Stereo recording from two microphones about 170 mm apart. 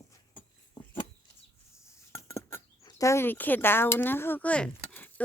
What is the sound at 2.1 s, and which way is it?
Speech, 15° left (ahead or behind).